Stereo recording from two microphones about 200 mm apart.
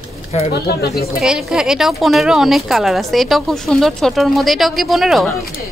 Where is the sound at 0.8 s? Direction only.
50° left (ahead or behind).